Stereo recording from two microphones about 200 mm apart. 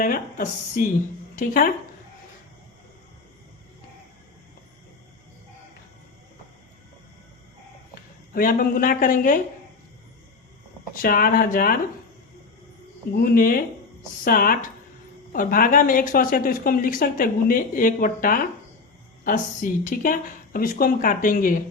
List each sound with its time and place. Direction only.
0.0 s speech: 45° left (ahead or behind)
8.3 s speech: 45° left (ahead or behind)
10.9 s speech: 45° left (ahead or behind)
13.1 s speech: 45° left (ahead or behind)